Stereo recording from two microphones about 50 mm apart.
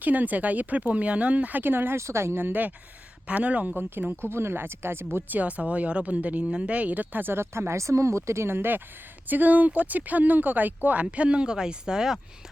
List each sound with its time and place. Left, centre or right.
0.0 s speech: right
2.0 s speech: right
2.4 s speech: right
3.2 s speech: right
3.8 s speech: right
5.3 s speech: right
7.7 s speech: right
11.0 s speech: right